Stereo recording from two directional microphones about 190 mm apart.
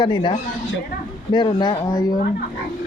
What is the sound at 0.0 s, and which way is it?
Speech, 25° left (ahead or behind).